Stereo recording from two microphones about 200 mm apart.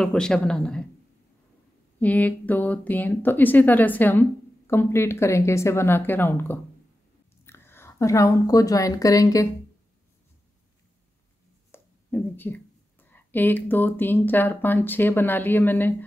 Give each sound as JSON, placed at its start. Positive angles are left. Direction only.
{"t": 0.0, "sound": "speech", "side_deg": 5}
{"t": 2.0, "sound": "a woman's voice", "side_deg": 10}
{"t": 11.7, "sound": "a sound", "side_deg": 10}
{"t": 13.1, "sound": "speech", "side_deg": 10}